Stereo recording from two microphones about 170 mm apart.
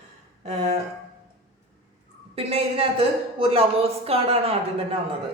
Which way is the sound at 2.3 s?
35° right (ahead or behind).